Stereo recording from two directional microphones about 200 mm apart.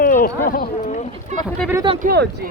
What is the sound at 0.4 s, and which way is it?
Speech, 45° left (ahead or behind).